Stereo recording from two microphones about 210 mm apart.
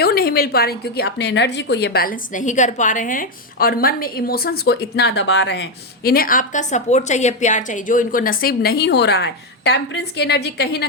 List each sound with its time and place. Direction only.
0.0 s a woman's voice: 45° left (ahead or behind)